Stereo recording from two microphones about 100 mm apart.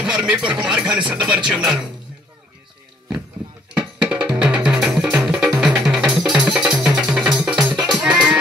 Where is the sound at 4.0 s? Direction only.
10° right (ahead or behind).